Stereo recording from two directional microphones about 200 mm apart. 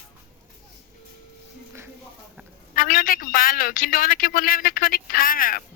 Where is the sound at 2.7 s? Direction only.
45° left (ahead or behind).